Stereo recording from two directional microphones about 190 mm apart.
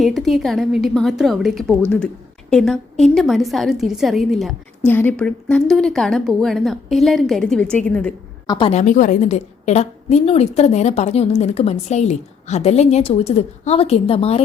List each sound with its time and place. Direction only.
0.0 s a woman's voice: centre (ahead or behind)
8.4 s a woman's voice: 25° left (ahead or behind)
8.8 s a woman's voice: 40° left (ahead or behind)